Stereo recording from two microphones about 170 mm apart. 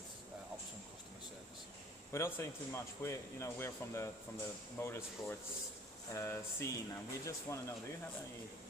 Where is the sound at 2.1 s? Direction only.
15° left (ahead or behind).